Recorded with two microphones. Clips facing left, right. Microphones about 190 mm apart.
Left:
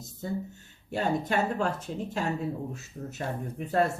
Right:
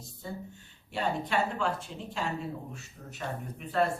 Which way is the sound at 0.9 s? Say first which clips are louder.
Left 3 dB; 45° left (ahead or behind).